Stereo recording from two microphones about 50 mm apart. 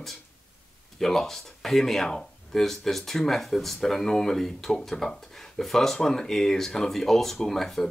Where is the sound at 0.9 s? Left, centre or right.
Centre.